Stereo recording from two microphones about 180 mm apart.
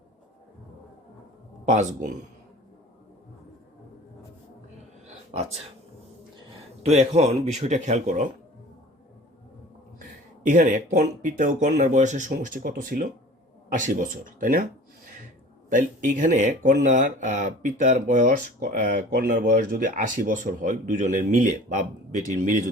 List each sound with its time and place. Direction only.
1.7 s speech: 40° right (ahead or behind)
6.8 s speech: 35° right (ahead or behind)
10.5 s speech: 45° right (ahead or behind)
15.7 s speech: 45° right (ahead or behind)